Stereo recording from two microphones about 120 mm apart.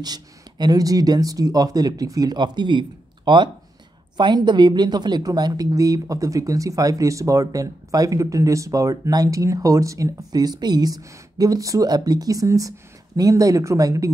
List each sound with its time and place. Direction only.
0.0 s speech: 35° right (ahead or behind)